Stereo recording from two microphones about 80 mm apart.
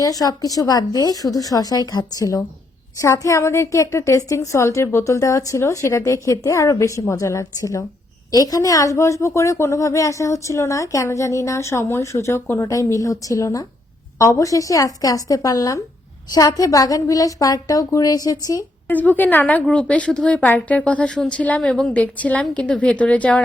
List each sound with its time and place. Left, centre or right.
0.0 s a woman's voice: left
18.9 s a woman's voice: left